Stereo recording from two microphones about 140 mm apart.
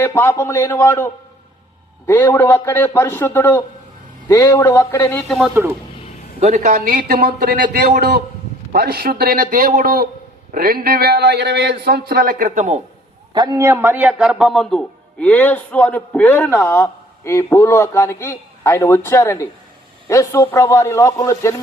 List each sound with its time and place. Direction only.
0.0 s a man's voice: 15° left (ahead or behind)
6.4 s speech: 60° right (ahead or behind); by 11.0 s 90° right
12.0 s speech: 90° right; by 12.8 s 60° right (ahead or behind)
13.3 s a man's voice: 30° right (ahead or behind); by 21.5 s 25° left (ahead or behind)